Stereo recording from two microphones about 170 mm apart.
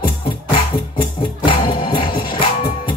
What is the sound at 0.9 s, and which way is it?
Music, 30° left (ahead or behind).